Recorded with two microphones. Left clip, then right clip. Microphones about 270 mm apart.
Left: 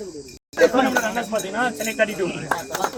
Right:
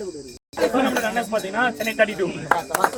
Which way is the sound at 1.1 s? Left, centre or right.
Centre.